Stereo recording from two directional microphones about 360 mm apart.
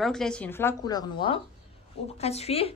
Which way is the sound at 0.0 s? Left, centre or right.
Centre.